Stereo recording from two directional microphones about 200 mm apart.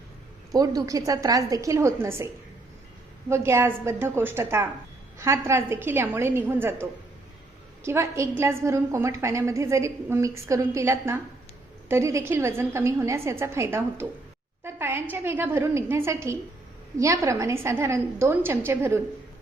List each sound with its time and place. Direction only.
0.5 s a woman's voice: 20° right (ahead or behind)
7.9 s a woman's voice: 15° right (ahead or behind)